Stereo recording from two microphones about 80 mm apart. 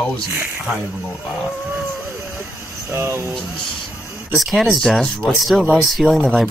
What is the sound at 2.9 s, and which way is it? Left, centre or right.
Speech, right.